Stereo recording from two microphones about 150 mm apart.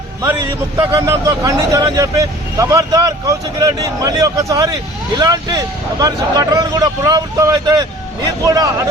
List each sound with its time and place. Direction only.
0.8 s speech: 20° right (ahead or behind)